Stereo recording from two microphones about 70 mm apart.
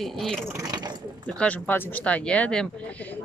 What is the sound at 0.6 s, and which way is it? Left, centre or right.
Speech, right.